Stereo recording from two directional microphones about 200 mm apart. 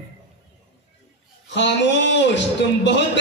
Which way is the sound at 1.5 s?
60° left (ahead or behind).